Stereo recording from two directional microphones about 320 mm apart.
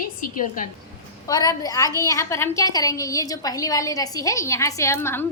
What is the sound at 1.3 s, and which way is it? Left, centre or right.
A woman's voice, centre.